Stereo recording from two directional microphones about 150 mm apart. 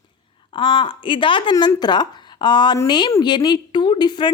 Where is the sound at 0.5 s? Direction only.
35° left (ahead or behind).